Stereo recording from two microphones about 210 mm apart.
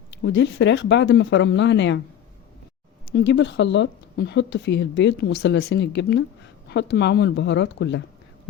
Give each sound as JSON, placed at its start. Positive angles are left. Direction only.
{"t": 0.2, "sound": "a woman's voice", "side_deg": 60}
{"t": 3.1, "sound": "a woman's voice", "side_deg": 55}